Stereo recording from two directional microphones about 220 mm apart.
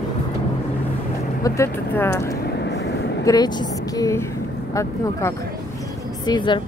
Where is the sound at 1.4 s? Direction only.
10° left (ahead or behind).